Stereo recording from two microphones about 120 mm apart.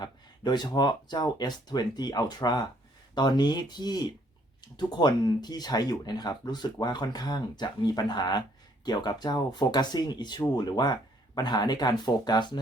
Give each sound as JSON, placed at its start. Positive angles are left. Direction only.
{"t": 0.0, "sound": "speech", "side_deg": 35}